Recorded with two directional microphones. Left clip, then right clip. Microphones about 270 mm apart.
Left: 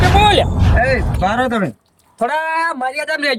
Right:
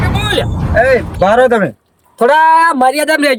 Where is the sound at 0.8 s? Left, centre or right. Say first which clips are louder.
Right 7 dB; centre.